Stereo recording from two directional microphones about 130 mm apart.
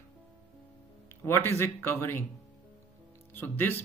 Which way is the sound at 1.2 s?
20° left (ahead or behind).